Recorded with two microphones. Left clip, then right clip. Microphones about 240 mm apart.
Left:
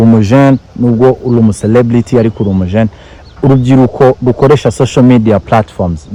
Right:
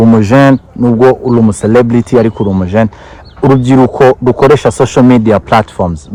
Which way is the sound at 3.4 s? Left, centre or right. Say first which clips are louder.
Right 2 dB; right.